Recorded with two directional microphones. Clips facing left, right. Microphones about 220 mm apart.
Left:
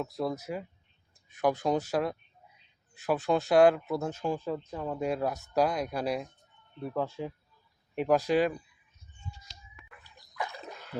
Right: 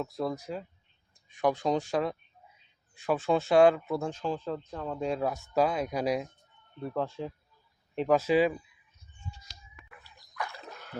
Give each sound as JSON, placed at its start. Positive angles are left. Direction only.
{"t": 0.0, "sound": "speech", "side_deg": 5}
{"t": 6.8, "sound": "speech", "side_deg": 5}
{"t": 10.0, "sound": "dog", "side_deg": 20}